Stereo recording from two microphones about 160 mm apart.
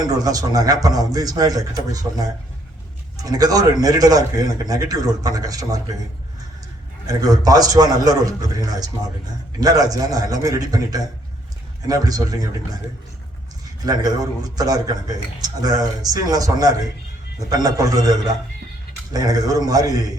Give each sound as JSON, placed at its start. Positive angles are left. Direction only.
{"t": 0.0, "sound": "a man's voice", "side_deg": -25}
{"t": 7.2, "sound": "a man's voice", "side_deg": -25}
{"t": 14.5, "sound": "a man's voice", "side_deg": -25}